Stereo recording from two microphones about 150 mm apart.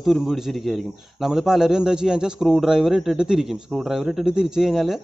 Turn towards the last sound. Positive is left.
turn(degrees=0)  # may be behind; listen again after turning